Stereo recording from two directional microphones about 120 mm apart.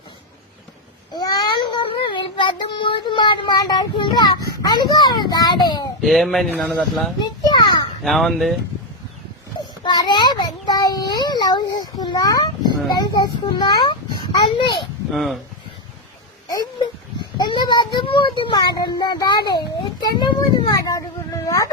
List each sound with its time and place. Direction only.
1.1 s child singing: 35° left (ahead or behind)
4.0 s a child's voice: 35° left (ahead or behind)
6.0 s speech: centre (ahead or behind)
7.2 s a sound: 35° left (ahead or behind)
8.0 s speech: centre (ahead or behind)
9.6 s child singing: 35° left (ahead or behind)
13.4 s a sound: 40° left (ahead or behind)
15.1 s speech: centre (ahead or behind)
17.2 s a woman's voice: 40° left (ahead or behind)